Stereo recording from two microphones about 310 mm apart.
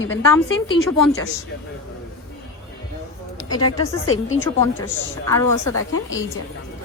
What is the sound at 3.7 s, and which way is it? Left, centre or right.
Speech, left.